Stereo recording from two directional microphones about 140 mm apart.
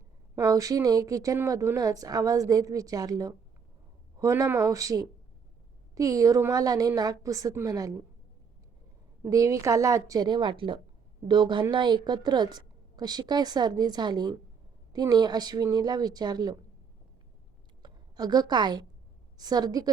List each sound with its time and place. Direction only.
0.3 s a woman's voice: 25° right (ahead or behind)
9.2 s a woman's voice: 25° right (ahead or behind)
17.8 s a woman's voice: 30° right (ahead or behind)